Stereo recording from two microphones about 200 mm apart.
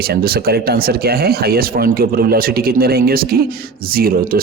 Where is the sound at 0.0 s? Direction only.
50° right (ahead or behind).